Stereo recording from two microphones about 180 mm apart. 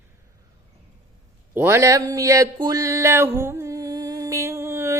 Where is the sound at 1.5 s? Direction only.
15° right (ahead or behind).